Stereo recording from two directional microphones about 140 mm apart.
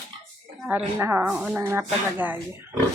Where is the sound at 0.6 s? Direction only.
10° right (ahead or behind).